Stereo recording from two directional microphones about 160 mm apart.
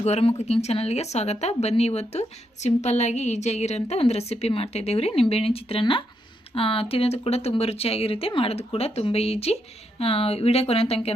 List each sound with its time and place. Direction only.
0.0 s speech: 40° left (ahead or behind)